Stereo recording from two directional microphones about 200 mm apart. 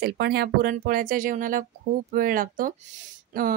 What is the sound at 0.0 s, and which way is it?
A woman's voice, 55° right (ahead or behind).